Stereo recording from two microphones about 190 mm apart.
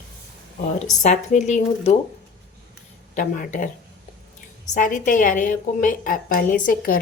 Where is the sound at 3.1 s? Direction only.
45° left (ahead or behind).